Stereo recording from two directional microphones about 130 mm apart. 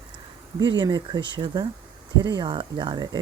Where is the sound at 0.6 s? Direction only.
35° right (ahead or behind).